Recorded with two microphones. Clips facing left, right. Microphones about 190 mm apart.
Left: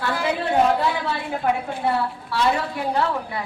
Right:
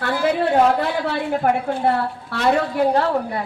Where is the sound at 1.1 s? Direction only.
55° right (ahead or behind).